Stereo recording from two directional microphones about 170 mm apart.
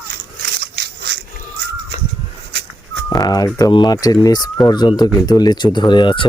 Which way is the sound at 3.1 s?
25° left (ahead or behind).